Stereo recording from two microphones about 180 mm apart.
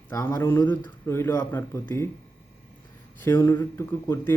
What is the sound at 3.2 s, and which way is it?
Speech, 15° left (ahead or behind).